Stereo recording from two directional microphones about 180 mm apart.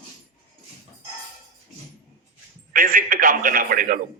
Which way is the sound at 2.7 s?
50° right (ahead or behind).